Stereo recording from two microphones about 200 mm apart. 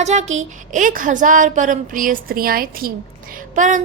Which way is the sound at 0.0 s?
35° right (ahead or behind).